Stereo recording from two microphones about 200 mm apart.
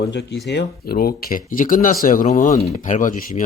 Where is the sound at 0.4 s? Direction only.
55° left (ahead or behind).